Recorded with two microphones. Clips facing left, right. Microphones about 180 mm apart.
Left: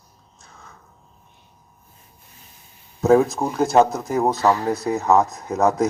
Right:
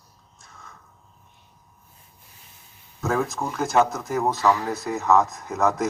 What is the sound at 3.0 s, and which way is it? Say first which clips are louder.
A man's voice: left 9 dB; 35° left (ahead or behind).